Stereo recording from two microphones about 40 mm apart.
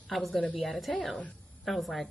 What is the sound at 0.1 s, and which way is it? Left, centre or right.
Speech, centre.